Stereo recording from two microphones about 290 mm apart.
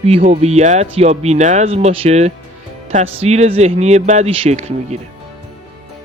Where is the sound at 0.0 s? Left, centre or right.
Right.